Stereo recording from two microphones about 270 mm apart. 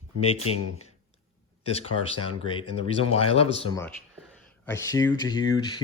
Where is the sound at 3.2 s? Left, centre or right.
Left.